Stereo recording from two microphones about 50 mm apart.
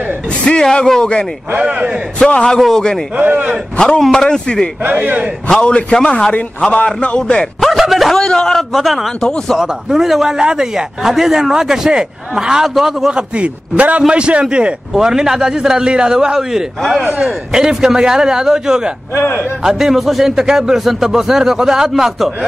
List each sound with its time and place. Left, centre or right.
0.5 s speech: centre
1.6 s a man's voice: right
2.1 s speech: centre
3.2 s speech: right
4.0 s speech: centre
4.8 s speech: right
5.6 s a man's voice: left
6.6 s a man's voice: left
7.6 s a sound: centre
8.1 s speech: centre
8.7 s a man's voice: centre
13.1 s a man's voice: right; by 18.8 s centre
19.1 s a man's voice: left
19.6 s a man's voice: centre